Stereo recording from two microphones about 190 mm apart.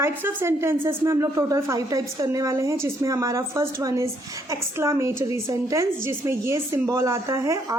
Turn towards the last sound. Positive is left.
turn(degrees=-15)  # may be behind; listen again after turning